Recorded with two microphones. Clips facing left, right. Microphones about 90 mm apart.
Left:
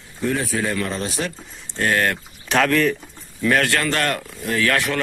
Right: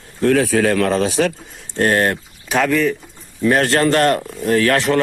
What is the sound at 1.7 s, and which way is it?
Speech, 35° right (ahead or behind).